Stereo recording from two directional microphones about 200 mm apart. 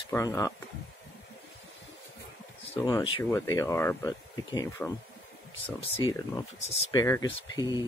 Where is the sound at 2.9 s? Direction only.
25° left (ahead or behind).